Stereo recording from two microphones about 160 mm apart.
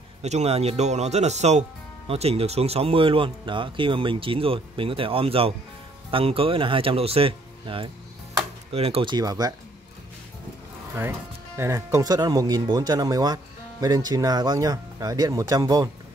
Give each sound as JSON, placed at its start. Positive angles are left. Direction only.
{"t": 0.2, "sound": "speech", "side_deg": -45}
{"t": 11.0, "sound": "speech", "side_deg": -15}